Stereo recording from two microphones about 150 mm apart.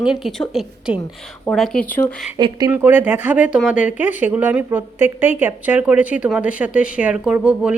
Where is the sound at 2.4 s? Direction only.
25° right (ahead or behind).